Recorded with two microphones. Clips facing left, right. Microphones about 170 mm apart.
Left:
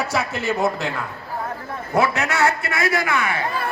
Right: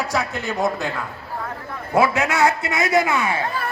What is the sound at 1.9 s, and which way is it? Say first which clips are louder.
Speech: right 2 dB; 10° right (ahead or behind).